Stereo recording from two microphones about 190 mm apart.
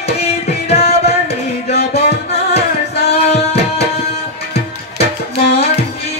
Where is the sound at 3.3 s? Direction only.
35° left (ahead or behind).